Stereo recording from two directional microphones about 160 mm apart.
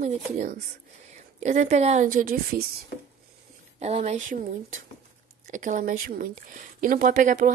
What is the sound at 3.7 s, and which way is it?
Speech, 40° right (ahead or behind).